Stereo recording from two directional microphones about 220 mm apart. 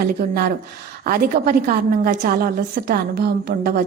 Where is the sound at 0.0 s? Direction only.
45° right (ahead or behind).